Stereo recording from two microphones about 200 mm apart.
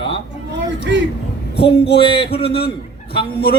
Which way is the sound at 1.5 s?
55° left (ahead or behind).